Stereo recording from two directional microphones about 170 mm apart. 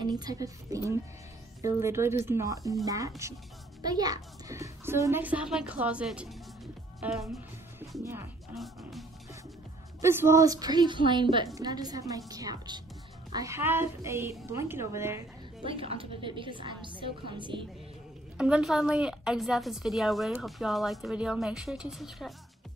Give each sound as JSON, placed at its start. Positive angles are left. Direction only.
{"t": 0.0, "sound": "a woman's voice", "side_deg": -25}
{"t": 8.0, "sound": "a child's voice", "side_deg": -15}
{"t": 10.0, "sound": "a woman's voice", "side_deg": -15}
{"t": 15.6, "sound": "a woman's voice", "side_deg": -35}
{"t": 18.4, "sound": "a woman's voice", "side_deg": -5}